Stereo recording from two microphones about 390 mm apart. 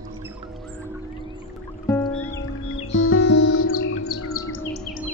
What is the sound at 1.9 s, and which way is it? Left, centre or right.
Music, centre.